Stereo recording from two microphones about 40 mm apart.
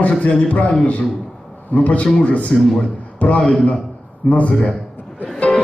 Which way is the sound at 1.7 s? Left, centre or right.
Left.